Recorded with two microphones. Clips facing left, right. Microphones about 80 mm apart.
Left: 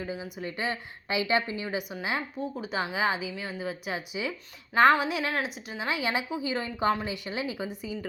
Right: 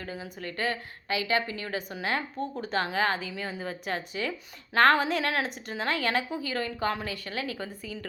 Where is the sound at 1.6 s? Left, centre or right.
Centre.